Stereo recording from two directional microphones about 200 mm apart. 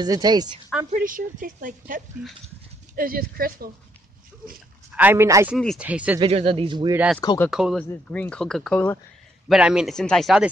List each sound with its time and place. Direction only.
0.0 s speech: 20° right (ahead or behind)
0.9 s a woman's voice: 45° right (ahead or behind)
3.0 s a woman's voice: 45° right (ahead or behind)
4.9 s speech: 10° right (ahead or behind)
5.6 s speech: centre (ahead or behind)
6.1 s speech: 25° right (ahead or behind)
6.9 s speech: 5° right (ahead or behind)
7.8 s speech: 10° left (ahead or behind)
9.5 s speech: 5° right (ahead or behind)